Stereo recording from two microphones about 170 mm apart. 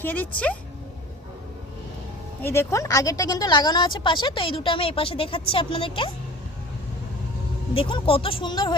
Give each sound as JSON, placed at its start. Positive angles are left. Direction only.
{"t": 0.0, "sound": "speech", "side_deg": 10}
{"t": 2.4, "sound": "a woman's voice", "side_deg": 15}
{"t": 7.7, "sound": "speech", "side_deg": 30}